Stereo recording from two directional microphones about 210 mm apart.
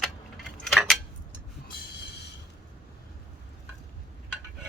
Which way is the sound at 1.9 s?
55° left (ahead or behind).